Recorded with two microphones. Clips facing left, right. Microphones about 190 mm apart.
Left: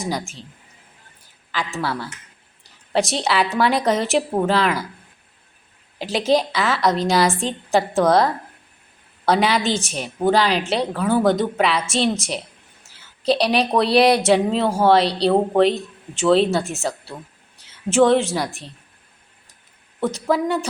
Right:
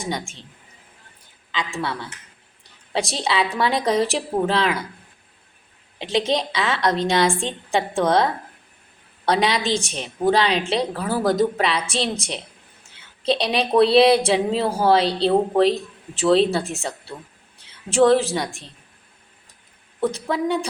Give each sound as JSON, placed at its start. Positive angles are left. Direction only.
{"t": 1.5, "sound": "speech", "side_deg": 0}
{"t": 6.0, "sound": "a woman's voice", "side_deg": 5}
{"t": 20.0, "sound": "speech", "side_deg": 0}